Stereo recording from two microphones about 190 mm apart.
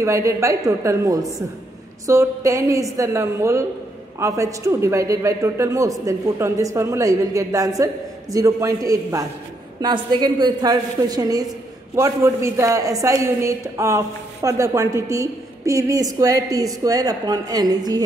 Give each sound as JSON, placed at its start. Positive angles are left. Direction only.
{"t": 0.0, "sound": "a woman's voice", "side_deg": -15}